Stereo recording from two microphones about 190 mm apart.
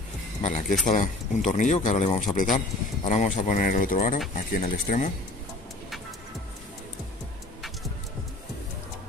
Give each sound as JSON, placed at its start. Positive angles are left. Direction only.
{"t": 0.4, "sound": "speech", "side_deg": 40}